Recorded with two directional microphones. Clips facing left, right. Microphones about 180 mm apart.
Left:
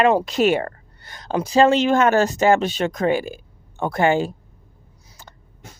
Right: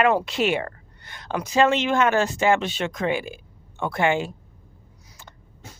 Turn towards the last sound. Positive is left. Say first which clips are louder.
# left 4 dB
turn(degrees=40)  # may be behind; listen again after turning